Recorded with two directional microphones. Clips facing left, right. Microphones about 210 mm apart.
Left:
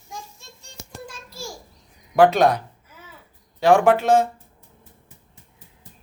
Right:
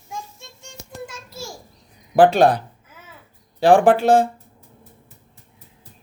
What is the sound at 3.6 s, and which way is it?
Speech, 30° right (ahead or behind).